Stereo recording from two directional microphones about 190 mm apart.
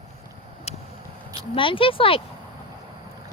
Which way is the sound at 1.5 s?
25° left (ahead or behind).